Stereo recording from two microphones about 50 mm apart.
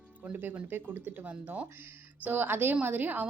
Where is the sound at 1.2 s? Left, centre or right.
Right.